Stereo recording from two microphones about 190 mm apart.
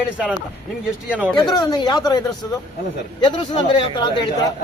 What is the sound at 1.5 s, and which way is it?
Speech, 20° left (ahead or behind).